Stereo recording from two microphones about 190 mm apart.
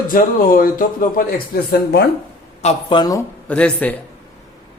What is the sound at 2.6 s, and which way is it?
Speech, 35° left (ahead or behind).